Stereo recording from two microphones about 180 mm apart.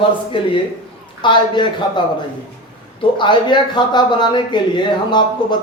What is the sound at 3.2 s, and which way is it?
Speech, 25° left (ahead or behind).